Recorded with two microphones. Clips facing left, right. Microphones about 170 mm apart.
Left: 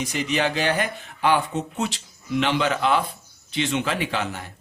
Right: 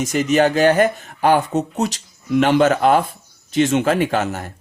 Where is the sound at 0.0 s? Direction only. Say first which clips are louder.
Right 8 dB; 45° right (ahead or behind).